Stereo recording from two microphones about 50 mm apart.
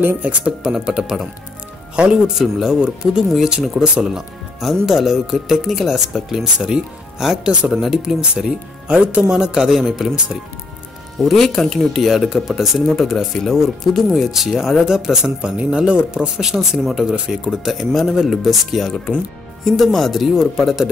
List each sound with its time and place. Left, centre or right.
0.2 s speech: right
0.7 s speech: centre
2.4 s speech: centre
4.0 s speech: centre
8.5 s speech: right; by 10.1 s centre
11.1 s speech: centre
15.4 s speech: centre
16.4 s speech: centre
17.5 s speech: centre